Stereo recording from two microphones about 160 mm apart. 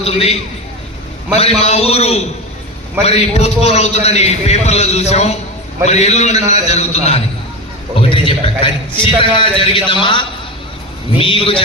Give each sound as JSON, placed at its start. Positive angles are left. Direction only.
{"t": 0.0, "sound": "a man's voice", "side_deg": 40}
{"t": 1.4, "sound": "a man's voice", "side_deg": 40}